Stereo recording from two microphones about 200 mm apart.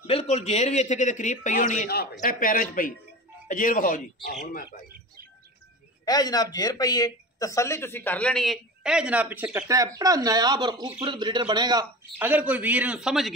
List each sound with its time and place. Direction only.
0.0 s speech: 30° left (ahead or behind)
6.0 s speech: 20° left (ahead or behind); by 12.3 s 20° right (ahead or behind)
12.3 s speech: 5° right (ahead or behind)